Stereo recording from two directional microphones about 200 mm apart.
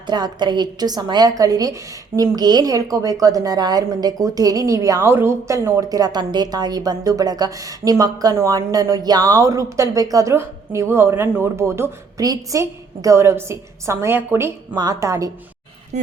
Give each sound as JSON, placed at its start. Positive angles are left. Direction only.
{"t": 0.1, "sound": "a woman's voice", "side_deg": -20}